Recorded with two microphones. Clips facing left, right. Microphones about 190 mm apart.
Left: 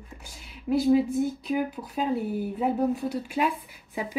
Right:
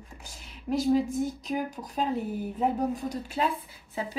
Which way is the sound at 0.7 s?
5° left (ahead or behind).